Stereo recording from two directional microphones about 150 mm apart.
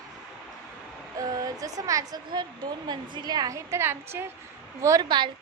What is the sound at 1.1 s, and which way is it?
Speech, 25° right (ahead or behind).